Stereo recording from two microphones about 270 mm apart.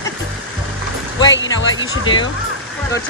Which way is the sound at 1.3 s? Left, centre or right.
Left.